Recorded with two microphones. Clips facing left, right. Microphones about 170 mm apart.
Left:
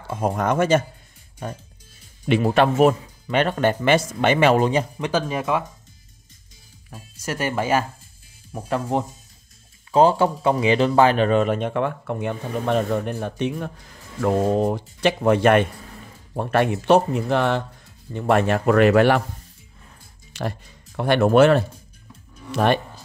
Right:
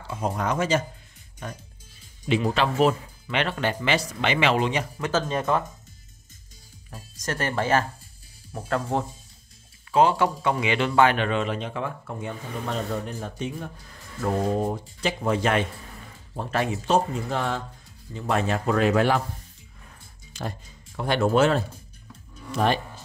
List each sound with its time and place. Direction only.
0.1 s speech: 50° left (ahead or behind)
2.2 s a man's voice: 55° left (ahead or behind); by 4.8 s 40° left (ahead or behind)
4.9 s speech: 15° left (ahead or behind)
6.9 s speech: 10° left (ahead or behind)
9.8 s a man's voice: 35° left (ahead or behind); by 17.6 s 70° left (ahead or behind)
18.1 s speech: 60° left (ahead or behind)
20.3 s speech: 65° left (ahead or behind)